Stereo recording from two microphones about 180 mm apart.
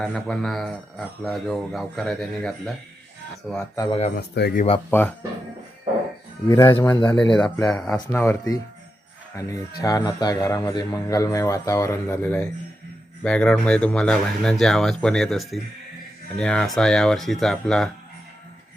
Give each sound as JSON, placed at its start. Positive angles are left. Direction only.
{"t": 0.0, "sound": "speech", "side_deg": 0}
{"t": 4.1, "sound": "speech", "side_deg": 60}
{"t": 4.9, "sound": "speech", "side_deg": 10}
{"t": 6.5, "sound": "a man's voice", "side_deg": 25}
{"t": 7.3, "sound": "a man's voice", "side_deg": 5}